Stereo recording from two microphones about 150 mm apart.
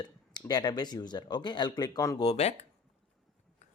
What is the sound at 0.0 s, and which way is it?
Speech, 25° left (ahead or behind).